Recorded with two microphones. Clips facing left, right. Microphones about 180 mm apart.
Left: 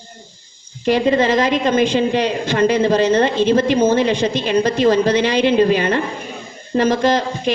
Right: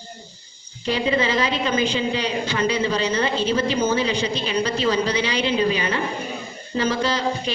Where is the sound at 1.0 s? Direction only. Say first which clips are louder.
Left 5 dB; 45° left (ahead or behind).